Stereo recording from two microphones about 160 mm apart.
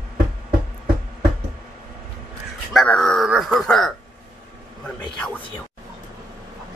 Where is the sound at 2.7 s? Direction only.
5° left (ahead or behind).